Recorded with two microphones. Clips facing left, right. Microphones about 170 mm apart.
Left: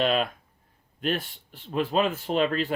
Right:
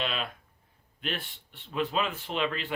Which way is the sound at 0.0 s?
45° left (ahead or behind).